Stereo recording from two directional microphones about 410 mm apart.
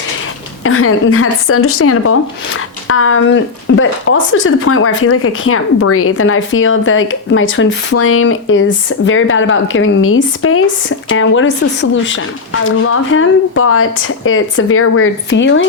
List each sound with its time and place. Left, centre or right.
0.6 s a woman's voice: left